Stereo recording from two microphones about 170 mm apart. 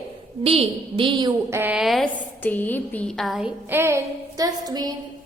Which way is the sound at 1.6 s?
5° right (ahead or behind).